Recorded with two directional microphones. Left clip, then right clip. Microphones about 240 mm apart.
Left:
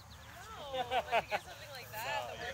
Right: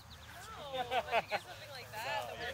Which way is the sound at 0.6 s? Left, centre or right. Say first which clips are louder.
Left 1 dB; left.